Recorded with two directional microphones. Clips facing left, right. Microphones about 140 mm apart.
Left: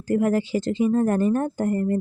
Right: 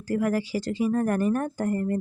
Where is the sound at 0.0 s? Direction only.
25° left (ahead or behind).